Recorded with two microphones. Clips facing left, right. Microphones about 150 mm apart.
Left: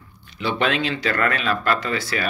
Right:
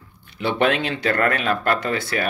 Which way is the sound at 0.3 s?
55° right (ahead or behind).